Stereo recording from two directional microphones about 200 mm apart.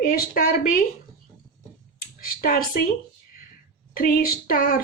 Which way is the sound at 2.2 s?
45° left (ahead or behind).